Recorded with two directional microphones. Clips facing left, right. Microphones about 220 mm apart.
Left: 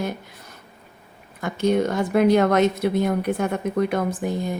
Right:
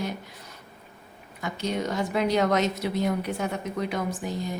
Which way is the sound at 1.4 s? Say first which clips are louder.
Left 9 dB; 50° left (ahead or behind).